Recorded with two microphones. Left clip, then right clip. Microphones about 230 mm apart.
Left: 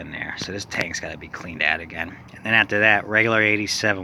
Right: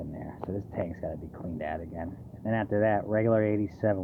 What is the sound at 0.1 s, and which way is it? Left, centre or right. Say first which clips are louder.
Speech: left 8 dB; centre.